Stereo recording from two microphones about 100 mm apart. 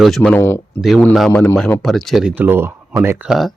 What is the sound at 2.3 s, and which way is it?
Speech, 20° right (ahead or behind).